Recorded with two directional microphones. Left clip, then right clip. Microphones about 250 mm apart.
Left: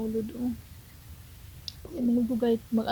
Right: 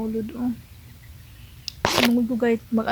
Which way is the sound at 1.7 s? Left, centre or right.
Centre.